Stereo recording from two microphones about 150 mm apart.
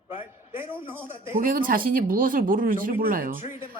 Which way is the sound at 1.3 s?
65° right (ahead or behind).